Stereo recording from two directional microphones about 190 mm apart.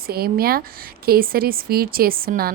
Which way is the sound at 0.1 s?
55° right (ahead or behind).